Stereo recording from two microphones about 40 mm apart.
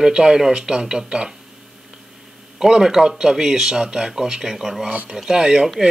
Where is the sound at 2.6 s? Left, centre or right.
Centre.